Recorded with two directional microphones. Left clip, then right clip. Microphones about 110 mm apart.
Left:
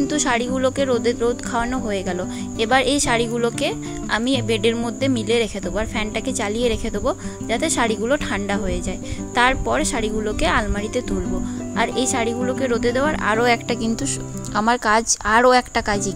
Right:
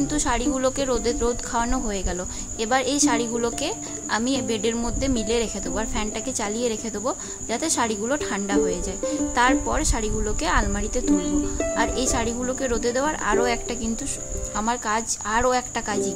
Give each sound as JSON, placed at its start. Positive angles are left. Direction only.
{"t": 0.1, "sound": "speech", "side_deg": 35}
{"t": 2.6, "sound": "speech", "side_deg": 40}
{"t": 14.6, "sound": "a woman's voice", "side_deg": 90}